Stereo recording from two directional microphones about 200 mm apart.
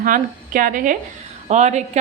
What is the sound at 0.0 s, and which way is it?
A woman's voice, 45° right (ahead or behind).